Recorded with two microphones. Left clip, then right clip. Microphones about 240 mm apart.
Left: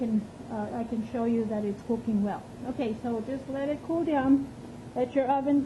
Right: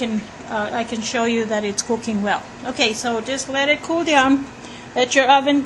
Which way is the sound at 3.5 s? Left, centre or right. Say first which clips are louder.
Right 12 dB; right.